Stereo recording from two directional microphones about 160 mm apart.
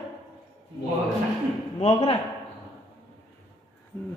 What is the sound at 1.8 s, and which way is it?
Speech, 35° left (ahead or behind).